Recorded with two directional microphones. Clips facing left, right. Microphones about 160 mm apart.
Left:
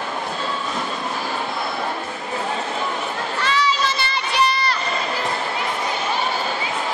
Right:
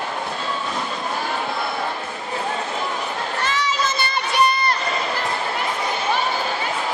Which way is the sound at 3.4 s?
50° right (ahead or behind).